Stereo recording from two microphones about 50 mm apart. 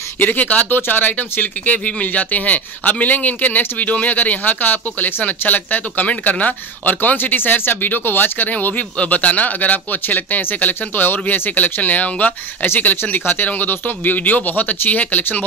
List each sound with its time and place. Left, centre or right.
0.2 s speech: left
12.6 s speech: left